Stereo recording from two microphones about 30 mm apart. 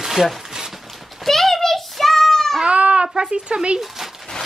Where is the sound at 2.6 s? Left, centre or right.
Right.